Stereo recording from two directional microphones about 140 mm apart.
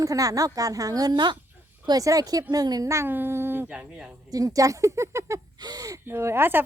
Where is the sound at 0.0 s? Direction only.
25° right (ahead or behind); by 4.1 s 5° right (ahead or behind).